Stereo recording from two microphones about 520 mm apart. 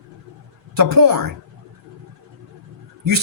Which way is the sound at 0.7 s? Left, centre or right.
Right.